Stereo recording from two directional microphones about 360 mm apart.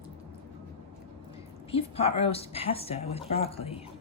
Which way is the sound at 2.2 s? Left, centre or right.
Centre.